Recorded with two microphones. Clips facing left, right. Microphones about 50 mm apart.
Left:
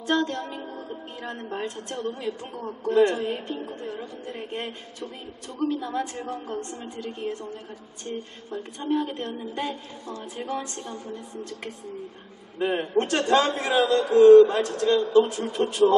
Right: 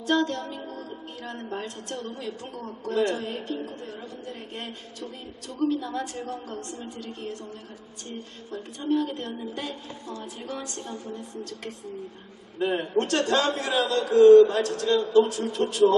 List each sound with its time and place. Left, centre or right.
0.0 s a woman's voice: centre
8.5 s a woman's voice: centre
12.5 s a man's voice: centre